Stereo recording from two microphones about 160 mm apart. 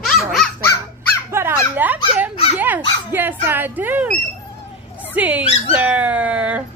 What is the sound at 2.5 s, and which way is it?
Dog, 10° right (ahead or behind).